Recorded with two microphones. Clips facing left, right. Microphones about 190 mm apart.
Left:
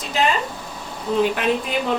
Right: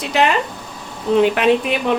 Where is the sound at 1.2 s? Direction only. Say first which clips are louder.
Right 5 dB; 70° right (ahead or behind).